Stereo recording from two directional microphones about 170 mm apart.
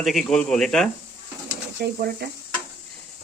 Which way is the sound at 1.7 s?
70° right (ahead or behind).